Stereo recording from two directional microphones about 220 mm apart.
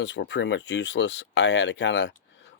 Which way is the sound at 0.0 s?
55° left (ahead or behind).